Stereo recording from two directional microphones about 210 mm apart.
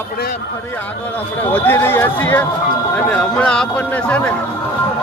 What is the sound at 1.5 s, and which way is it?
Speech, 10° left (ahead or behind).